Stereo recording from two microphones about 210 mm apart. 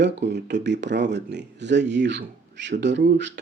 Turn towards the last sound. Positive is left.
turn(degrees=-55)  # may be behind; listen again after turning